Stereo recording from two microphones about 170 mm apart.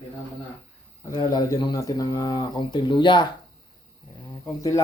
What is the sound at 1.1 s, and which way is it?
A man's voice, 25° left (ahead or behind).